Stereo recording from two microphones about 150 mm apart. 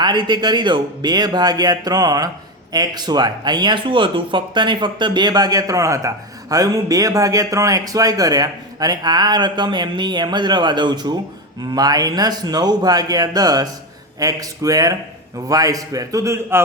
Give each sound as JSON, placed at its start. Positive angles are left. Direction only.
{"t": 0.0, "sound": "speech", "side_deg": -30}